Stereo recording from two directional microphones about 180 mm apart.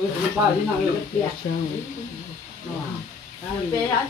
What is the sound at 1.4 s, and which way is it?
Speech, 60° left (ahead or behind).